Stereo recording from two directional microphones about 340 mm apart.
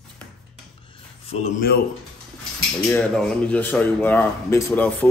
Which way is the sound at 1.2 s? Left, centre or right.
Centre.